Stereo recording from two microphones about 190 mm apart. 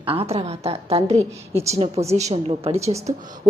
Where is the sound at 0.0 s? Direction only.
30° right (ahead or behind).